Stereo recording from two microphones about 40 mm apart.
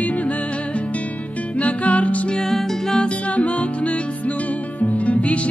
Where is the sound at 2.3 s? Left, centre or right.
Centre.